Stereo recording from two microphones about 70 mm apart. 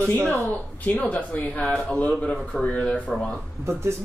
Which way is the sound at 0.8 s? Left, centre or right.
Centre.